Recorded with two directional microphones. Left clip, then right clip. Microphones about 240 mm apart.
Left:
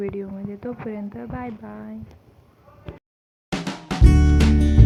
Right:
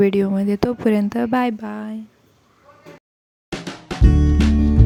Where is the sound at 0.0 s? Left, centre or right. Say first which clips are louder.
Right 12 dB; right.